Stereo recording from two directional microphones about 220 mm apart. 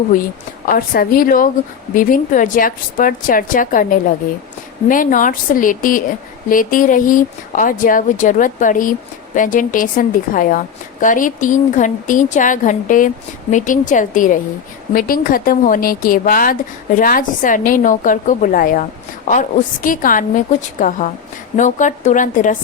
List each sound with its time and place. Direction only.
0.7 s speech: 40° left (ahead or behind)